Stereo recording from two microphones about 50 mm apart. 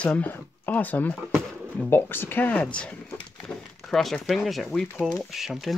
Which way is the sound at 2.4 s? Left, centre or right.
Left.